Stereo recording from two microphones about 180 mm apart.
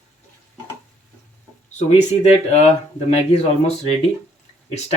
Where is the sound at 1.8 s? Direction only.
40° left (ahead or behind).